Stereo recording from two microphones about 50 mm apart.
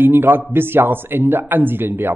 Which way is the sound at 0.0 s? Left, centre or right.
Right.